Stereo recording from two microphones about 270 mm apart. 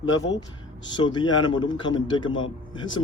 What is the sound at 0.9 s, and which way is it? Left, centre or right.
Speech, centre.